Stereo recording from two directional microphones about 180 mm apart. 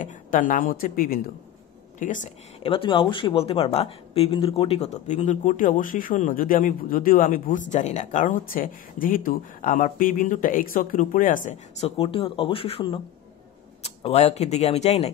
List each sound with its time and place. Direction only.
0.0 s speech: 50° left (ahead or behind)
2.6 s speech: 30° left (ahead or behind); by 11.9 s 45° left (ahead or behind)
12.0 s speech: 30° left (ahead or behind)